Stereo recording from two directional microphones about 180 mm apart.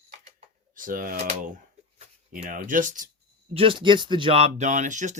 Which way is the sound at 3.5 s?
30° right (ahead or behind).